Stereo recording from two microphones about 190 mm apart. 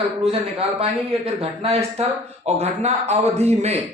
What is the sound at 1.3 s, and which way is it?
Speech, 30° right (ahead or behind).